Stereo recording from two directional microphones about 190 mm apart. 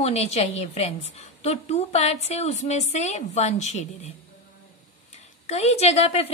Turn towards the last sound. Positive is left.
turn(degrees=35)  # may be behind; listen again after turning